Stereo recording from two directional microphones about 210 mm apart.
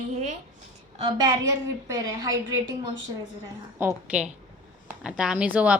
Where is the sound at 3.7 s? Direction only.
10° right (ahead or behind).